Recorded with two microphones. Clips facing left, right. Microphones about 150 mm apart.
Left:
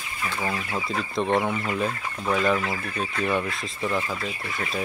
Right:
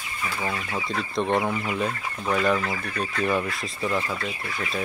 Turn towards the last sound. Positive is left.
turn(degrees=0)  # may be behind; listen again after turning